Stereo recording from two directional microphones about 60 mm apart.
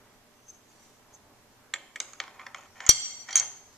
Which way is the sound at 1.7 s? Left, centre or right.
Centre.